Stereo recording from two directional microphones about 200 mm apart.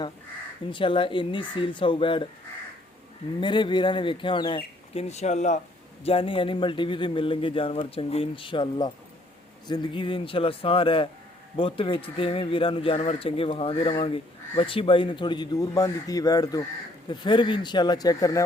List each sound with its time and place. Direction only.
0.7 s a man's voice: 25° left (ahead or behind)
3.4 s a man's voice: 25° left (ahead or behind)